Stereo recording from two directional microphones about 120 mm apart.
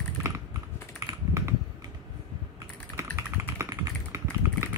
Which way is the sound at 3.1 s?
25° right (ahead or behind).